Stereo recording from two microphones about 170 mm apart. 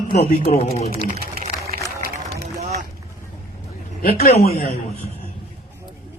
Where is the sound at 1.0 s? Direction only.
60° right (ahead or behind).